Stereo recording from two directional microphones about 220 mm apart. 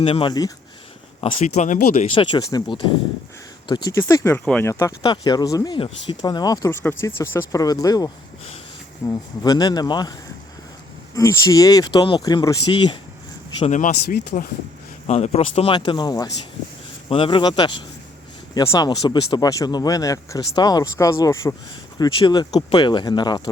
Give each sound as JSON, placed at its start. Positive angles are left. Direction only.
{"t": 0.0, "sound": "speech", "side_deg": 25}
{"t": 1.2, "sound": "speech", "side_deg": 30}
{"t": 2.1, "sound": "speech", "side_deg": 20}
{"t": 13.6, "sound": "speech", "side_deg": 35}